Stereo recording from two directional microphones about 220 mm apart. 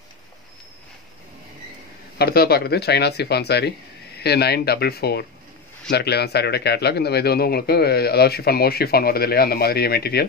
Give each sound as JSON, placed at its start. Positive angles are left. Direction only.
{"t": 2.1, "sound": "a man's voice", "side_deg": 45}